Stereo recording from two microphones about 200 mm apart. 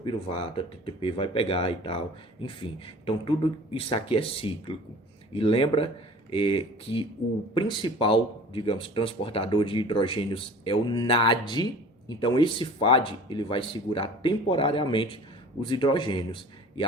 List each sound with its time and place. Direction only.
0.0 s speech: 25° left (ahead or behind)